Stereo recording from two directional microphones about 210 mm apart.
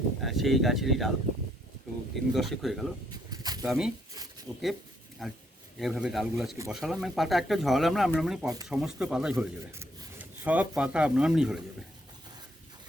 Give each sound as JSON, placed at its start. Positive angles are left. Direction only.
{"t": 0.2, "sound": "speech", "side_deg": 0}
{"t": 2.1, "sound": "speech", "side_deg": 0}
{"t": 3.2, "sound": "a sound", "side_deg": -20}
{"t": 3.7, "sound": "speech", "side_deg": -5}